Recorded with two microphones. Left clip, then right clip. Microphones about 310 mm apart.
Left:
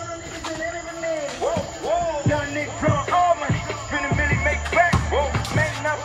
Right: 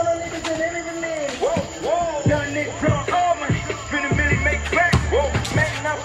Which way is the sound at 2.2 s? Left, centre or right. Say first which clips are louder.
Right 2 dB; left.